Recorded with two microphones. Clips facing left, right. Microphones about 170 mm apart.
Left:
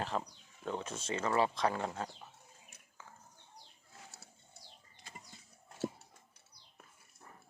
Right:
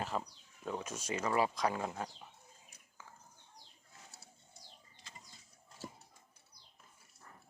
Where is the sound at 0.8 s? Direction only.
30° left (ahead or behind).